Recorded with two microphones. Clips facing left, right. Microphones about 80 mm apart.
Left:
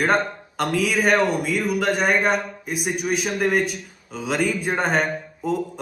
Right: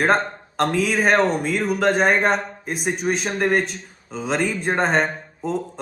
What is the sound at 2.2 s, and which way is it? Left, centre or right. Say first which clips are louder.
Speech: right 1 dB; centre.